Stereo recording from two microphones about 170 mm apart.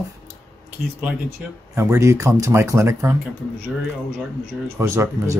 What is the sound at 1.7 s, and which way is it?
Speech, 15° right (ahead or behind).